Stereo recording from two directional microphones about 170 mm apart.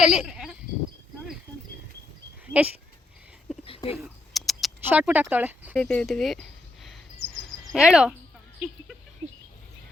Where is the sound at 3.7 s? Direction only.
35° left (ahead or behind).